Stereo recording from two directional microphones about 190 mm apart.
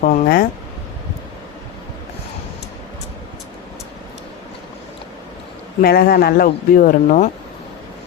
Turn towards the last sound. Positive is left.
turn(degrees=45)  # may be behind; listen again after turning